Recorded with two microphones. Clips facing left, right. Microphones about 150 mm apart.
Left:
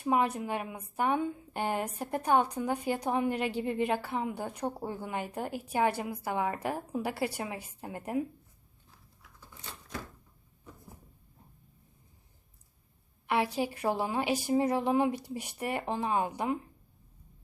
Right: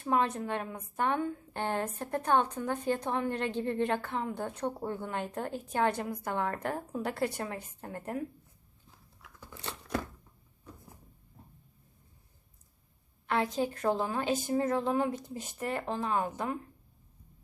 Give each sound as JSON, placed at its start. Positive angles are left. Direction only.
{"t": 0.0, "sound": "a woman's voice", "side_deg": 10}
{"t": 9.2, "sound": "a sound", "side_deg": -75}
{"t": 13.2, "sound": "a woman's voice", "side_deg": 10}